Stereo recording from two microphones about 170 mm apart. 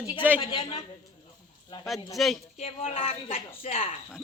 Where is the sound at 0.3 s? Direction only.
30° left (ahead or behind).